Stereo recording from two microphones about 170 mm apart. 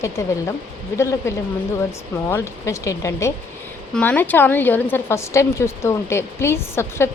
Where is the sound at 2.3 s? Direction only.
15° left (ahead or behind).